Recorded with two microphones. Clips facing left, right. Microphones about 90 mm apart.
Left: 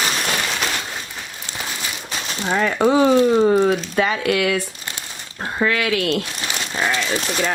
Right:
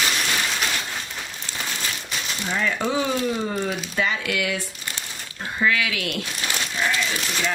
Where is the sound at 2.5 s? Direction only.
50° left (ahead or behind).